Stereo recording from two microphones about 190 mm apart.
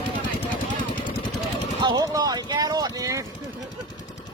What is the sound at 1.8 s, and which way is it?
Vehicle, 20° right (ahead or behind).